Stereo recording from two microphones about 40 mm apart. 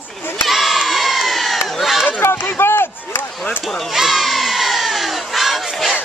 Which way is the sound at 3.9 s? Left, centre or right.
Centre.